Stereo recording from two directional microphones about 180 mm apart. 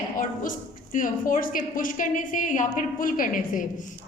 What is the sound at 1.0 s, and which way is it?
A woman's voice, 50° left (ahead or behind).